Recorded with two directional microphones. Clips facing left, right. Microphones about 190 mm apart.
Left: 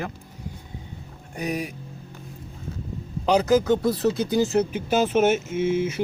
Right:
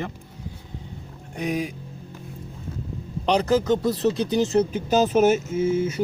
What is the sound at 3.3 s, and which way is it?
Speech, 10° left (ahead or behind).